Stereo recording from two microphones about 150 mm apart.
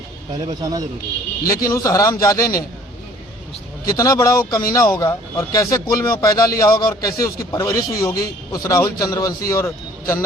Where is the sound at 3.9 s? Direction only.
20° left (ahead or behind).